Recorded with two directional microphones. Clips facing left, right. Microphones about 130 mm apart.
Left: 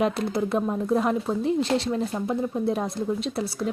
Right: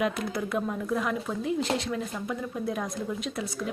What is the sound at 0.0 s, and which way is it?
A woman's voice, 30° left (ahead or behind).